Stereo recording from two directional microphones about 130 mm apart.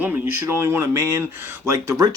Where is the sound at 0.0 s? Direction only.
15° right (ahead or behind).